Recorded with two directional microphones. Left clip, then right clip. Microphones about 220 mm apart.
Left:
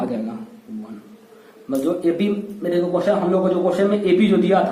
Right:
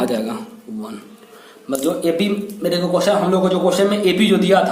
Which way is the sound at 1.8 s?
20° right (ahead or behind).